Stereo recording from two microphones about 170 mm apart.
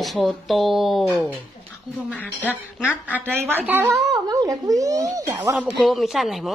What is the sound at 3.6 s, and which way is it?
Speech, 10° right (ahead or behind).